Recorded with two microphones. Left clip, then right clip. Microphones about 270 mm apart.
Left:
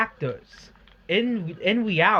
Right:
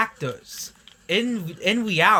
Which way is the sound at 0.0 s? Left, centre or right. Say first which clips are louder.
Right 1 dB; right.